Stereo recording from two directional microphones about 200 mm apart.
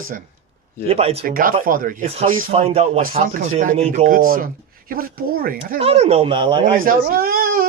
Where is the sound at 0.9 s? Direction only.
30° right (ahead or behind).